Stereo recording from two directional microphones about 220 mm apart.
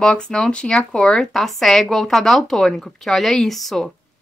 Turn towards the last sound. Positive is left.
turn(degrees=0)  # may be behind; listen again after turning